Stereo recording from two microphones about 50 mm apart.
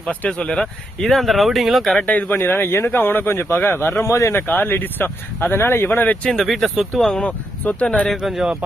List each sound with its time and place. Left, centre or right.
0.3 s speech: centre
0.6 s speech: centre
2.0 s speech: left
2.2 s speech: left
4.0 s speech: left
4.4 s speech: left
6.4 s speech: centre
7.2 s speech: left
8.1 s speech: centre